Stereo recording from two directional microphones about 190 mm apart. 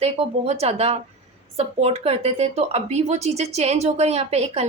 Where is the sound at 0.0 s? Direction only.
35° right (ahead or behind).